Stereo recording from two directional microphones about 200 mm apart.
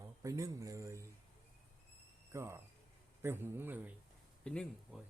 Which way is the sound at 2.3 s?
15° right (ahead or behind).